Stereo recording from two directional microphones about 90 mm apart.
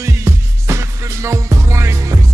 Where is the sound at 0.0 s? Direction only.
35° right (ahead or behind).